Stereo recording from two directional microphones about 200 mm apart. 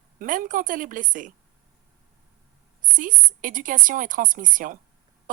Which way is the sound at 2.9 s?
40° right (ahead or behind).